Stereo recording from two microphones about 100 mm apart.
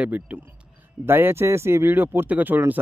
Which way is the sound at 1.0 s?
25° right (ahead or behind).